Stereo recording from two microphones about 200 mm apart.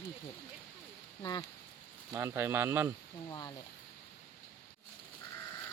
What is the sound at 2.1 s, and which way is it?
Speech, 10° right (ahead or behind).